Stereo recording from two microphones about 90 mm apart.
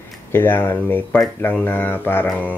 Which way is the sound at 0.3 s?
25° left (ahead or behind).